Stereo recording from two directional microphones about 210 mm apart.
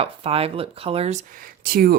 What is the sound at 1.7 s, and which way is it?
Speech, 45° right (ahead or behind).